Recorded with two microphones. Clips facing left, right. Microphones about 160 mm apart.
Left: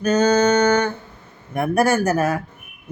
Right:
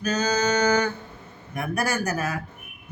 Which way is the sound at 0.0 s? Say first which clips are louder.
Left 8 dB; 50° left (ahead or behind).